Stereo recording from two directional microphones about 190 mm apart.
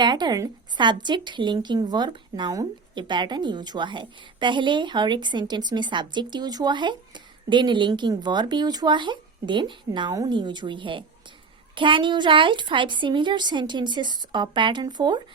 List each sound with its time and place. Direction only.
0.0 s speech: 20° right (ahead or behind)